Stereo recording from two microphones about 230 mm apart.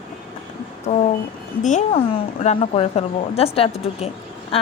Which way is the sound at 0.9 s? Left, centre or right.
Left.